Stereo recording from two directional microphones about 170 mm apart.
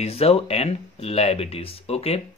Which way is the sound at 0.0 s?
35° left (ahead or behind).